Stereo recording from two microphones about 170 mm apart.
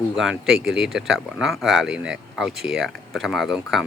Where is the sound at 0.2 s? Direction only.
Centre (ahead or behind).